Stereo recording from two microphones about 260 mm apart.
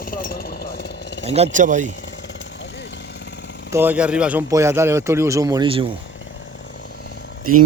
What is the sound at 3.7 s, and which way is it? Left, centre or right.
A man's voice, centre.